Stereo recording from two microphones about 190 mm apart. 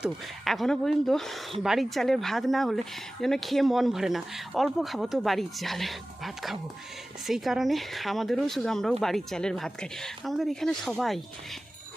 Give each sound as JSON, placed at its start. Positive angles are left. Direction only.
{"t": 0.0, "sound": "speech", "side_deg": 0}